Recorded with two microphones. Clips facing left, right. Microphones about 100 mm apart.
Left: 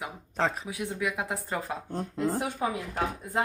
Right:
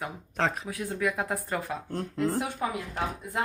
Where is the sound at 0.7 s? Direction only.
10° left (ahead or behind).